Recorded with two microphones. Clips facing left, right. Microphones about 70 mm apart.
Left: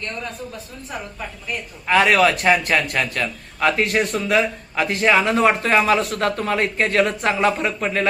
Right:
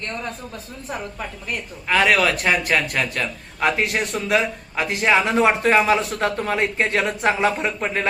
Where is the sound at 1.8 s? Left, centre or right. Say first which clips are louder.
Left 2 dB; centre.